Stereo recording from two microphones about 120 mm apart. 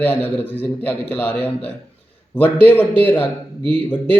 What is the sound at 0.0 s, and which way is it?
Speech, 15° left (ahead or behind).